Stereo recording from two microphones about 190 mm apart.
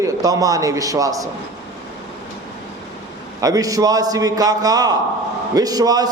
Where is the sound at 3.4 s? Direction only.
20° right (ahead or behind).